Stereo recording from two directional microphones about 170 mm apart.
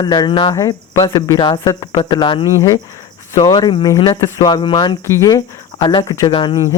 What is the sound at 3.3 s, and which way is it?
Speech, 30° left (ahead or behind).